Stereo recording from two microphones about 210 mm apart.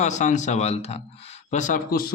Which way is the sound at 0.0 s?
35° left (ahead or behind).